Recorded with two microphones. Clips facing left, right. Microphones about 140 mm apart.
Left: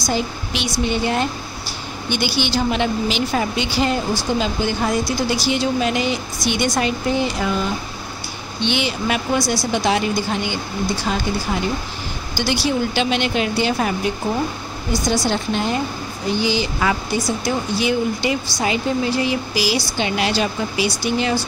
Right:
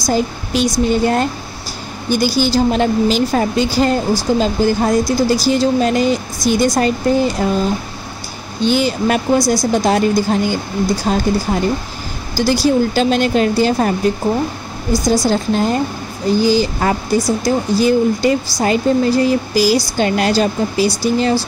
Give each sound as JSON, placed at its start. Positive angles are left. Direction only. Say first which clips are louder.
{"t": 0.0, "sound": "a woman's voice", "louder": "right 5 dB", "side_deg": -40}